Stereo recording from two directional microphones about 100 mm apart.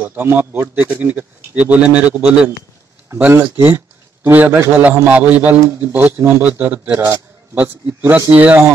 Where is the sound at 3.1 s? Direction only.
25° right (ahead or behind).